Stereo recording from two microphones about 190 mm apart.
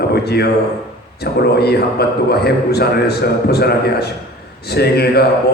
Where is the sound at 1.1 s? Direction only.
60° left (ahead or behind).